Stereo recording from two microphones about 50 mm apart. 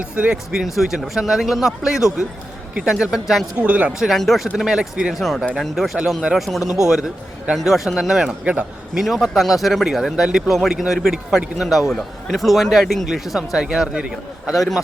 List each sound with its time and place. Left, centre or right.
0.0 s speech: centre
0.6 s speech: centre
3.6 s speech: right
3.9 s speech: centre
4.5 s speech: centre
5.1 s speech: centre
10.2 s speech: centre
10.5 s speech: centre
14.5 s speech: centre